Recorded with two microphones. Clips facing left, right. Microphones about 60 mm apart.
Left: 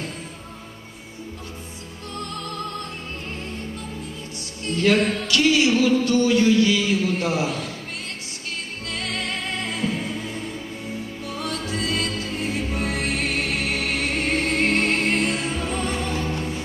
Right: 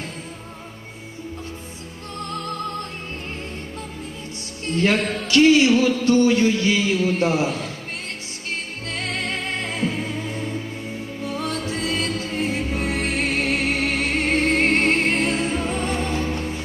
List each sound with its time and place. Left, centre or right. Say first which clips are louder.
4.7 s a sound: left 1 dB; right
8.9 s music: right 2 dB; right
11.4 s music: even; right